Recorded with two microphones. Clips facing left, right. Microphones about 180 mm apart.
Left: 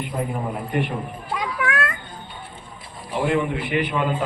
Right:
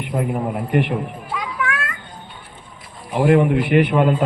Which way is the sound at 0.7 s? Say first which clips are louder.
Right 6 dB; 65° right (ahead or behind).